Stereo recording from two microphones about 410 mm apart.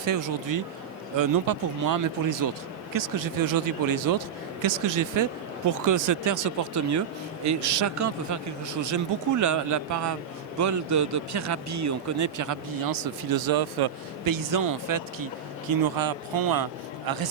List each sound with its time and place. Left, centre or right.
0.0 s a man's voice: right